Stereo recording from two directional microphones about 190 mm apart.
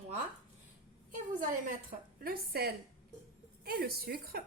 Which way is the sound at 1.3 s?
45° right (ahead or behind).